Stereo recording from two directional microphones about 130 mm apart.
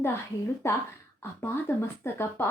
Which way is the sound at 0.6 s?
20° left (ahead or behind).